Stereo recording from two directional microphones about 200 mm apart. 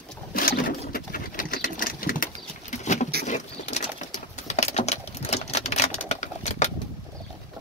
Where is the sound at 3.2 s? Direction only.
35° left (ahead or behind).